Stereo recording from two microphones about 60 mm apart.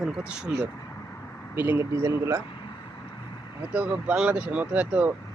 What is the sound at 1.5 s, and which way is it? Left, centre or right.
Speech, right.